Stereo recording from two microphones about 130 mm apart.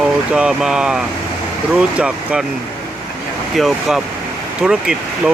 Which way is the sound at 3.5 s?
Centre (ahead or behind).